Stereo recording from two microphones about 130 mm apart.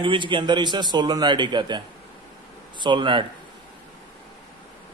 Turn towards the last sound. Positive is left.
turn(degrees=-40)  # may be behind; listen again after turning